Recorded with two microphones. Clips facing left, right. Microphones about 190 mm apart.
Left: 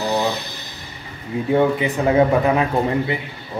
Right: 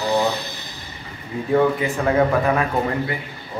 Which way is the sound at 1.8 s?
20° left (ahead or behind).